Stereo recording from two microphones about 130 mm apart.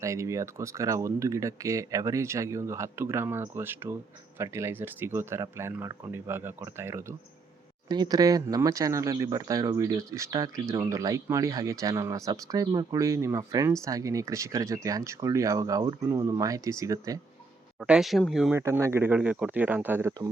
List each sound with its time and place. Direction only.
0.0 s speech: 25° right (ahead or behind)
7.9 s speech: 35° right (ahead or behind)
17.8 s speech: 5° right (ahead or behind)
18.5 s speech: 20° right (ahead or behind)